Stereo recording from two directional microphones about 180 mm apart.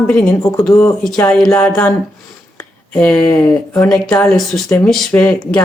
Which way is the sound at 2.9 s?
5° left (ahead or behind).